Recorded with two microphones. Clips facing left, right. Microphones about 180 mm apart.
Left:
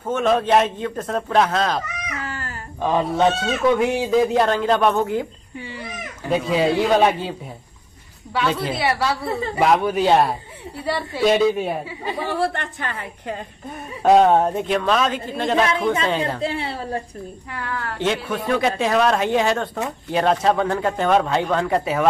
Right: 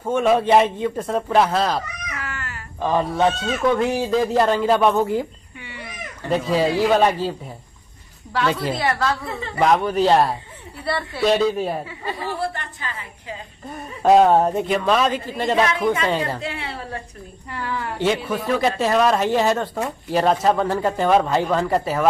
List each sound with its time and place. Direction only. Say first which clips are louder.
0.0 s speech: right 1 dB; 10° right (ahead or behind)
2.2 s a sound: left 2 dB; 30° left (ahead or behind)
2.8 s speech: left 1 dB; centre (ahead or behind)
6.2 s speech: even; centre (ahead or behind)
8.3 s speech: even; 5° left (ahead or behind)
9.2 s a woman's voice: left 5 dB; 35° left (ahead or behind)
9.6 s speech: right 1 dB; 5° left (ahead or behind)
10.9 s speech: left 1 dB; 10° left (ahead or behind)
12.3 s a woman's voice: left 5 dB; 65° left (ahead or behind)
13.7 s speech: even; centre (ahead or behind)
15.7 s a woman's voice: even; 25° left (ahead or behind)
17.5 s speech: right 3 dB; centre (ahead or behind)